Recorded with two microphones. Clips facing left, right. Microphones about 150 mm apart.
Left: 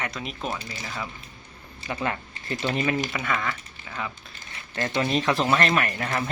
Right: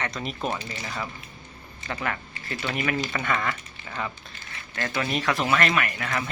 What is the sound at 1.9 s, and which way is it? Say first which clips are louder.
Speech: left 2 dB; 25° left (ahead or behind).